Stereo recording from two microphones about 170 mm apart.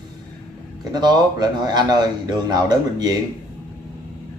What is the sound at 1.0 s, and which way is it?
Speech, 25° right (ahead or behind).